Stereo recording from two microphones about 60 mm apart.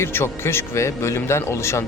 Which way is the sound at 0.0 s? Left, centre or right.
Left.